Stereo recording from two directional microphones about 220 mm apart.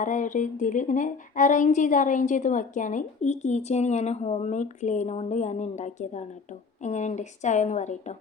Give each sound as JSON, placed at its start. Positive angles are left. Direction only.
{"t": 0.0, "sound": "speech", "side_deg": 35}